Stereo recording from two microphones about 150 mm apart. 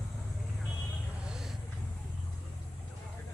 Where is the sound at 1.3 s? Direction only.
5° right (ahead or behind).